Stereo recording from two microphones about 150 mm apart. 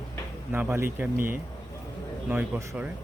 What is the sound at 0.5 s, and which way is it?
Speech, 15° right (ahead or behind).